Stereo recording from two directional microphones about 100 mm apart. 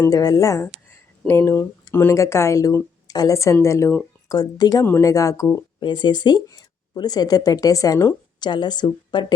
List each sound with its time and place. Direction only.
0.1 s speech: 40° left (ahead or behind)
4.3 s speech: 40° left (ahead or behind)
5.8 s speech: 50° left (ahead or behind); by 8.1 s 30° left (ahead or behind)
8.4 s a woman's voice: 50° left (ahead or behind)